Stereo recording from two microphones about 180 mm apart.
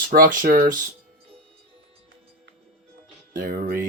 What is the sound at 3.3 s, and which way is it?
Speech, 50° right (ahead or behind).